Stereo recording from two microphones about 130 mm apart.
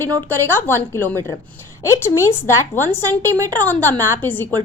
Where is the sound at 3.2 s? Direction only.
25° right (ahead or behind).